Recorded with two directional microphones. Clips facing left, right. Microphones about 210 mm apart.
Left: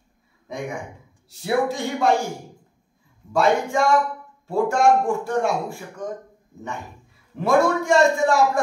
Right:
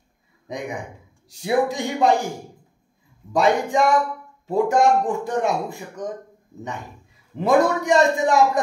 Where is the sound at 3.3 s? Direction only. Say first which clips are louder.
Right 1 dB; 15° right (ahead or behind).